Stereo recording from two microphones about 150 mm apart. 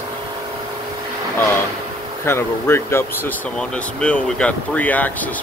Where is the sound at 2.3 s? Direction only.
15° left (ahead or behind).